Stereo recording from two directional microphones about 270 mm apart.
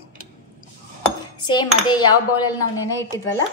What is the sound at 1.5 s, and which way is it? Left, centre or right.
Dishes, centre.